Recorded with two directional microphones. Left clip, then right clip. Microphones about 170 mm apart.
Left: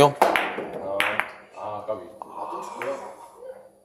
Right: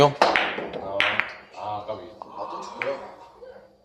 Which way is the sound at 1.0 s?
25° left (ahead or behind).